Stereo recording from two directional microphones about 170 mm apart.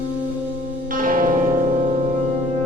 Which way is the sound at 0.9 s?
55° right (ahead or behind).